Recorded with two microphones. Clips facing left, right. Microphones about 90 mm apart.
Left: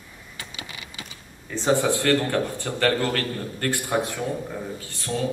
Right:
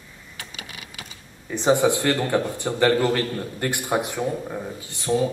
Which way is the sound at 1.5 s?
20° right (ahead or behind).